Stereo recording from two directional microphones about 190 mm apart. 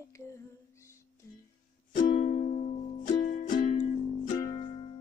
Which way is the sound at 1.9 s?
40° left (ahead or behind).